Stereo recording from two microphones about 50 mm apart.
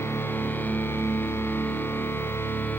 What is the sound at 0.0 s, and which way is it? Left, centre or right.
Music, left.